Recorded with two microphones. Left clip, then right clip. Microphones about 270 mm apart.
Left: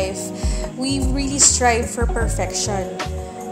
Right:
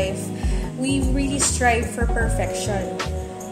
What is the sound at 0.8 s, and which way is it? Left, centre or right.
Speech, left.